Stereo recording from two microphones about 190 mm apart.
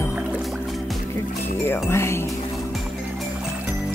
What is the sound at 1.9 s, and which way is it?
Speech, 15° left (ahead or behind).